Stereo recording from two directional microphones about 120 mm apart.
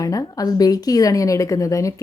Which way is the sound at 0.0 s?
30° left (ahead or behind).